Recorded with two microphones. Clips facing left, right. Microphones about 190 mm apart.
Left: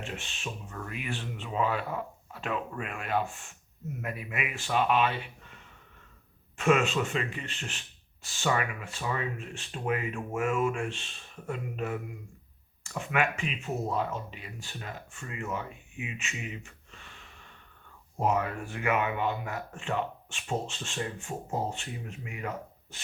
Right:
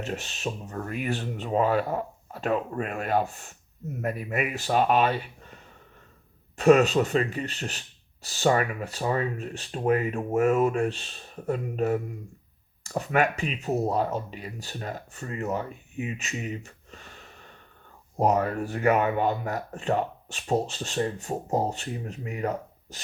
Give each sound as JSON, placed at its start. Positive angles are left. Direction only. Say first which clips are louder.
{"t": 0.0, "sound": "speech", "louder": "right 7 dB", "side_deg": -40}
{"t": 6.6, "sound": "speech", "louder": "right 7 dB", "side_deg": -40}